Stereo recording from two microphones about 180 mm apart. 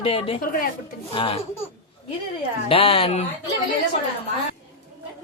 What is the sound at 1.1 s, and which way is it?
Speech, 30° left (ahead or behind).